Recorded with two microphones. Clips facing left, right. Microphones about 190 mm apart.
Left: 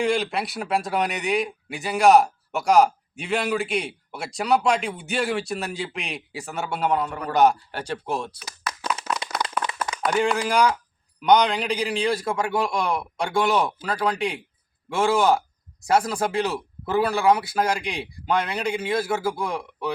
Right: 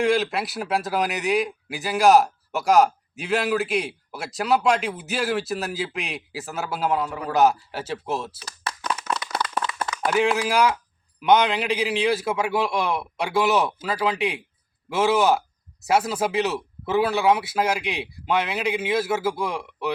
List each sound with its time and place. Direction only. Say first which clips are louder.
0.0 s a man's voice: right 2 dB; centre (ahead or behind)
8.7 s clapping: even; 30° right (ahead or behind)
9.1 s clapping: right 1 dB; 30° left (ahead or behind)
10.1 s a man's voice: right 1 dB; 5° right (ahead or behind)